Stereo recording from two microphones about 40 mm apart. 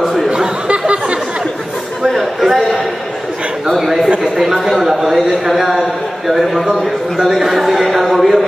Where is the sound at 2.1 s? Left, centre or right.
Centre.